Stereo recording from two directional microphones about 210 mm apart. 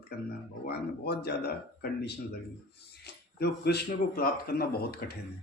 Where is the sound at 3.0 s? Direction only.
50° left (ahead or behind).